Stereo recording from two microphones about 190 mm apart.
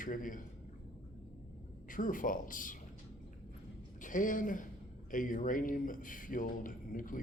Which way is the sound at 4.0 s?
45° left (ahead or behind).